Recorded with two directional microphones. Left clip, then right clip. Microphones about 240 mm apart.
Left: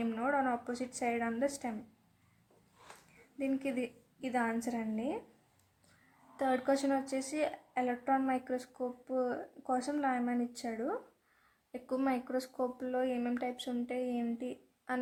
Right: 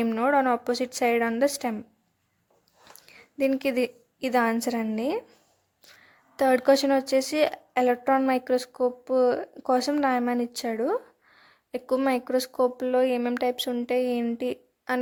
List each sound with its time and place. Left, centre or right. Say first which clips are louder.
0.0 s a woman's voice: right 10 dB; right
3.3 s a woman's voice: right 12 dB; right
6.3 s a woman's voice: right 12 dB; right